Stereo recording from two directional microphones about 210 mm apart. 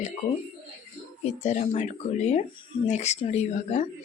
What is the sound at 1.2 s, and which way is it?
Speech, 35° left (ahead or behind).